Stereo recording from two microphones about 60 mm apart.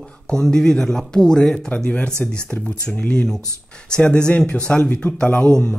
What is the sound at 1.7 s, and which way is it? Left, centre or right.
Speech, left.